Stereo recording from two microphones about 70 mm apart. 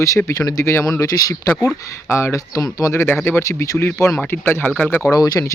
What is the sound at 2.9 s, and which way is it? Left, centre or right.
Speech, left.